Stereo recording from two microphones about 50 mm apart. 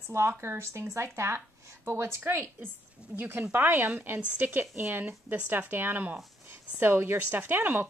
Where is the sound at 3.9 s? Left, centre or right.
Right.